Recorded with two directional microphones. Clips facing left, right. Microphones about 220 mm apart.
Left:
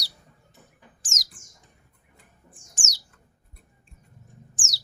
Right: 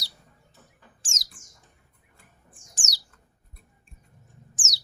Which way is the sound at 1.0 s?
30° right (ahead or behind).